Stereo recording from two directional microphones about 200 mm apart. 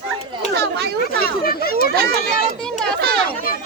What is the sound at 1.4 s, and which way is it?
Speech, 50° left (ahead or behind).